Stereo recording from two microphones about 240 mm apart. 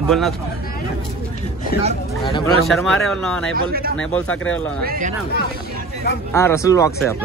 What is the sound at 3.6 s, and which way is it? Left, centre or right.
Speech, right.